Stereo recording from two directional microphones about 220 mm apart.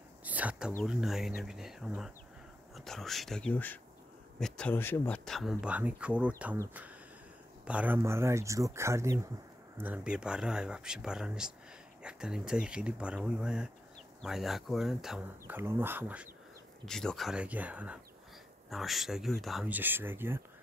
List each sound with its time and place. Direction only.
0.2 s a sound: 5° right (ahead or behind)
0.8 s speech: centre (ahead or behind)
16.8 s speech: centre (ahead or behind)